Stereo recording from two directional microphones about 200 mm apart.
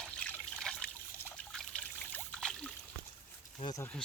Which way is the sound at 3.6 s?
20° left (ahead or behind).